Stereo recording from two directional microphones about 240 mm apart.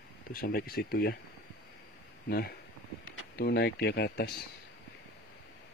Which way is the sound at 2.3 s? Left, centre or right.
Left.